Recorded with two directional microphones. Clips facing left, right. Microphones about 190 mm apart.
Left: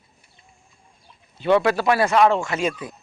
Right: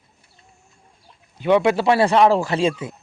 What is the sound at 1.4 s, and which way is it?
Speech, 15° right (ahead or behind).